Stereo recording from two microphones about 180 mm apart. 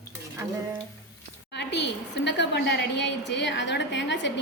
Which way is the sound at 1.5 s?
70° left (ahead or behind).